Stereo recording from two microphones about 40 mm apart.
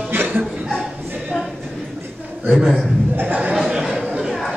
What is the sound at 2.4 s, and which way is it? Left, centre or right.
Speech, centre.